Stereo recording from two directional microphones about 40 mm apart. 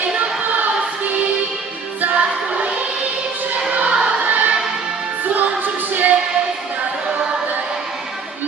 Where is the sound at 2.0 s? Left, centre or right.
Right.